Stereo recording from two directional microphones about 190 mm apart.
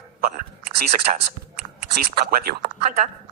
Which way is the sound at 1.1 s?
40° right (ahead or behind).